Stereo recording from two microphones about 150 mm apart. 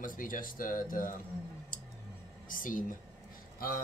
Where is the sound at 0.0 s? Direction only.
65° left (ahead or behind).